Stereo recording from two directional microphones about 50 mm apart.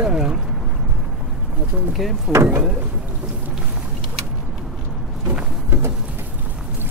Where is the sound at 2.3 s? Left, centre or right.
Right.